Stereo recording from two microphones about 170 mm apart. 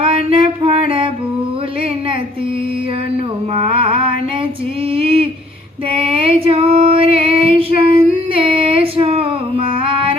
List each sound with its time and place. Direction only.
0.0 s female singing: 30° right (ahead or behind)
3.5 s mantra: 30° right (ahead or behind)
4.9 s a sound: 35° right (ahead or behind)